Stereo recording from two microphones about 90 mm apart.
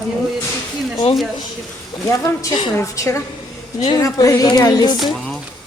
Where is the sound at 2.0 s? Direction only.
35° left (ahead or behind).